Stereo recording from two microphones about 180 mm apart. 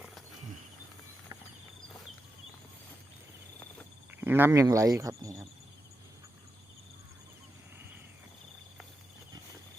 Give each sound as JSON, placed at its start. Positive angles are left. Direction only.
{"t": 4.2, "sound": "speech", "side_deg": -10}